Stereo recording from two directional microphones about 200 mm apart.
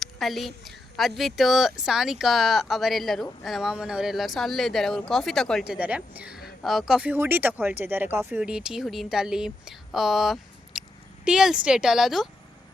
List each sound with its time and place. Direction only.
0.0 s speech: centre (ahead or behind)